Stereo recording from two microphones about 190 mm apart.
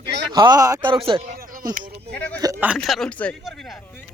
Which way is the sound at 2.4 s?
15° right (ahead or behind).